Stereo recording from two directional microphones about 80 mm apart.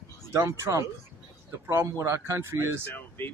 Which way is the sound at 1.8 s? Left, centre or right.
Right.